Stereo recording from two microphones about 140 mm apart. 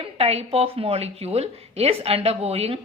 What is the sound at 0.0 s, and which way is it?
A woman's voice, 45° right (ahead or behind).